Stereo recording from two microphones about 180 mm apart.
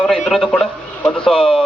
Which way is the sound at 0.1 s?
5° left (ahead or behind).